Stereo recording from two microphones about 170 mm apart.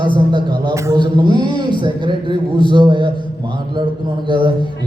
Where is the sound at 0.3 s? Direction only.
25° right (ahead or behind).